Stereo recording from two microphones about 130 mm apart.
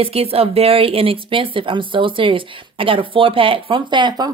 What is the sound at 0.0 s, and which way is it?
A woman's voice, 50° right (ahead or behind).